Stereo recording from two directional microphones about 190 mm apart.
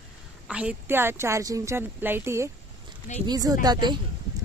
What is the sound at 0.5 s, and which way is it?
Speech, 5° right (ahead or behind).